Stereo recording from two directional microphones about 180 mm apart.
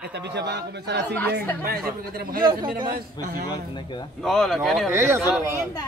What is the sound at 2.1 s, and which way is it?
Speech, 55° right (ahead or behind).